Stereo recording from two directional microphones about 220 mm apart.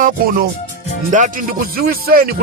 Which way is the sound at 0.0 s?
40° right (ahead or behind).